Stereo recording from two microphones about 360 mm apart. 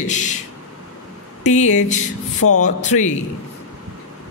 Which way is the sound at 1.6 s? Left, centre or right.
Centre.